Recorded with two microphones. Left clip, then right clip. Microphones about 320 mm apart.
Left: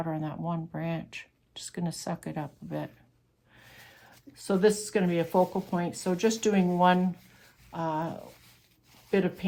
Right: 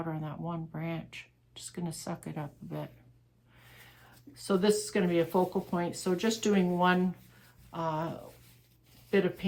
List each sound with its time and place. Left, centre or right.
0.0 s speech: left
3.6 s a sound: left
4.4 s speech: left